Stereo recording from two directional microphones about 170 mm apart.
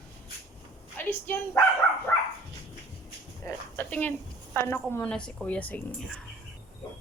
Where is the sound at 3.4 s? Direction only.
10° left (ahead or behind).